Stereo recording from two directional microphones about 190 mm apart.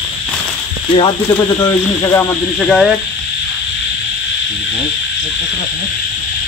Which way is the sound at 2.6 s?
Centre (ahead or behind).